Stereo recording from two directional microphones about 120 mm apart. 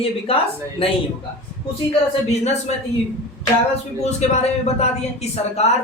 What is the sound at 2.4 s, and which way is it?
Speech, 65° left (ahead or behind).